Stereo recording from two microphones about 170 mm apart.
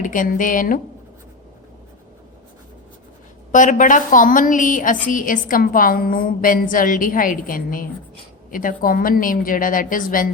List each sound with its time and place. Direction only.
0.0 s a woman's voice: 50° left (ahead or behind)
3.5 s a woman's voice: 50° left (ahead or behind)